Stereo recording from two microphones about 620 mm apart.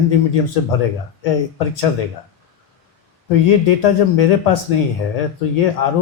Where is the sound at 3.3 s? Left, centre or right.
Left.